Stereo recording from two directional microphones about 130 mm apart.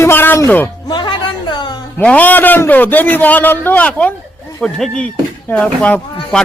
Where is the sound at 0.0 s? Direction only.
15° left (ahead or behind).